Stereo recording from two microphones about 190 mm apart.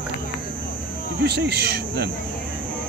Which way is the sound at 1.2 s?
60° right (ahead or behind).